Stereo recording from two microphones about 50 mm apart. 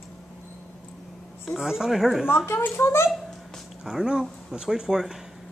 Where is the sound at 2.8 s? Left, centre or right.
Left.